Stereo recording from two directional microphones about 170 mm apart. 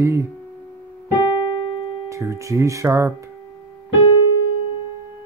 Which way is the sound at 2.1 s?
20° right (ahead or behind).